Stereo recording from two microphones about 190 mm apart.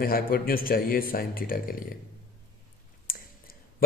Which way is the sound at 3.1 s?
50° left (ahead or behind).